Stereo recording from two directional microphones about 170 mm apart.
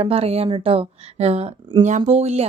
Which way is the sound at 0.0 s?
35° right (ahead or behind).